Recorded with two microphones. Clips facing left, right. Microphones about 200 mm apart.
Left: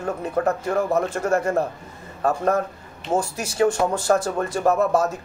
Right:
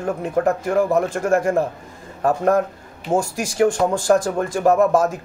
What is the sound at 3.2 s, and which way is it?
Speech, 90° right.